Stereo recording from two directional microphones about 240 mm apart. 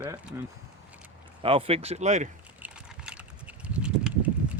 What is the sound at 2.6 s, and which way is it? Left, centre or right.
Horse, centre.